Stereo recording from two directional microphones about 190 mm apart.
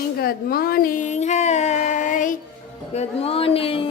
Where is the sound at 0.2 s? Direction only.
50° left (ahead or behind).